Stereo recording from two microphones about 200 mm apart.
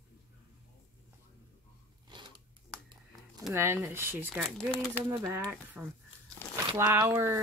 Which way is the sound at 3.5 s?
10° right (ahead or behind).